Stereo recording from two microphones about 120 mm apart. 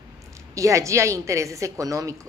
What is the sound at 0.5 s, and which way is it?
A woman's voice, 25° right (ahead or behind).